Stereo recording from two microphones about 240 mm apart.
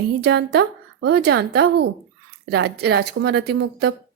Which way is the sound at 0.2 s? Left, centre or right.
Right.